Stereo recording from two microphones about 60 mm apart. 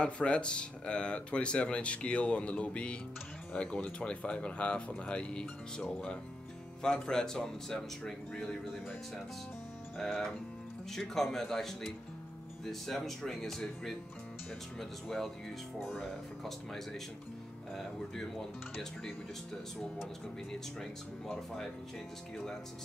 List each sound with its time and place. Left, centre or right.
0.0 s speech: centre
9.9 s speech: centre
20.5 s speech: centre